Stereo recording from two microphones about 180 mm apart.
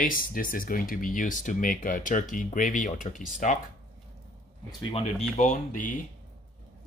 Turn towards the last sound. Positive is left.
turn(degrees=45)  # may be behind; listen again after turning